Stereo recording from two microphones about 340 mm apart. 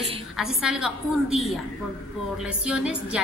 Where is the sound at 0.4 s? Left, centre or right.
Centre.